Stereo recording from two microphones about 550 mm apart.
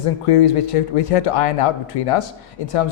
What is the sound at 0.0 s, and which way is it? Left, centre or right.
A man's voice, left.